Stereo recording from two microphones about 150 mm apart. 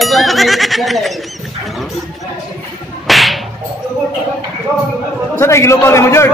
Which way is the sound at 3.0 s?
Centre (ahead or behind).